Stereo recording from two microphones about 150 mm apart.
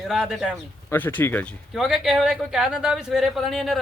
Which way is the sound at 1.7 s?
5° right (ahead or behind).